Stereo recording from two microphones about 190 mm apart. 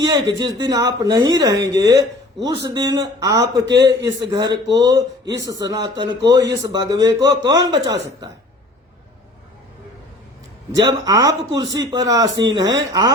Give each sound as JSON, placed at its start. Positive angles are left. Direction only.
{"t": 0.0, "sound": "speech", "side_deg": -20}
{"t": 10.7, "sound": "speech", "side_deg": -20}